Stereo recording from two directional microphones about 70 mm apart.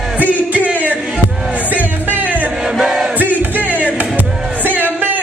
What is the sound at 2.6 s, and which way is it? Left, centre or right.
Crowd, centre.